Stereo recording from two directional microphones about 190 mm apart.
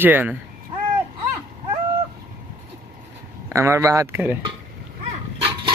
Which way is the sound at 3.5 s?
15° right (ahead or behind).